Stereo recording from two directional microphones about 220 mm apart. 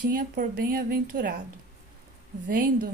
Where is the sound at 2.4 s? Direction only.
40° right (ahead or behind).